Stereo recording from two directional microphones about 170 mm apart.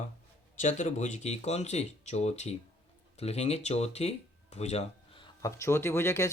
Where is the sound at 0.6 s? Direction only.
45° left (ahead or behind).